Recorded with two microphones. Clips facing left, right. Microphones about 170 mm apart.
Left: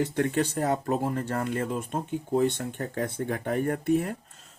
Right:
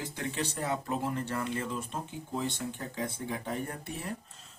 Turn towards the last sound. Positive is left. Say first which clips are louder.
# left 13 dB
turn(degrees=50)  # may be behind; listen again after turning